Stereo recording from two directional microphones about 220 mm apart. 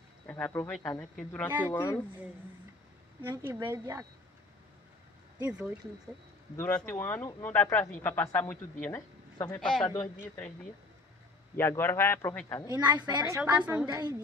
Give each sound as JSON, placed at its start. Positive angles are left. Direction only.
{"t": 0.3, "sound": "speech", "side_deg": 10}
{"t": 1.7, "sound": "speech", "side_deg": 15}
{"t": 3.2, "sound": "speech", "side_deg": -10}
{"t": 5.4, "sound": "speech", "side_deg": -5}
{"t": 6.5, "sound": "a woman's voice", "side_deg": 5}
{"t": 9.8, "sound": "speech", "side_deg": 15}
{"t": 11.5, "sound": "speech", "side_deg": 10}
{"t": 12.6, "sound": "speech", "side_deg": -20}
{"t": 13.4, "sound": "speech", "side_deg": -5}